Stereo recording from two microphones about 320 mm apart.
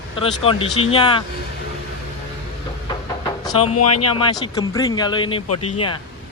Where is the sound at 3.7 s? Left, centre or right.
Left.